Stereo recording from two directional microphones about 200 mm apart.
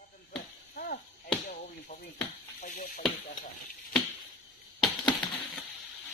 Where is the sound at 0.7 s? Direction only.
45° left (ahead or behind).